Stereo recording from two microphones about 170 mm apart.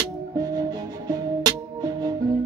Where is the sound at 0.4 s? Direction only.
20° right (ahead or behind).